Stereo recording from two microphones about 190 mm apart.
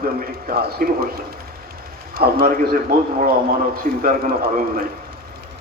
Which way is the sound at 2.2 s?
55° right (ahead or behind).